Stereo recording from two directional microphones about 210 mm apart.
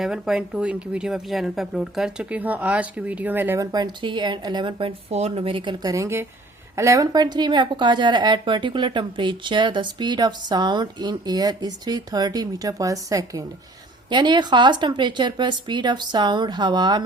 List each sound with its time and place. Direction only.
0.0 s a woman's voice: 5° right (ahead or behind); by 17.0 s 20° right (ahead or behind)